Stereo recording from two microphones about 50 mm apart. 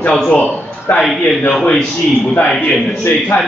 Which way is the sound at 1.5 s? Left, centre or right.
Centre.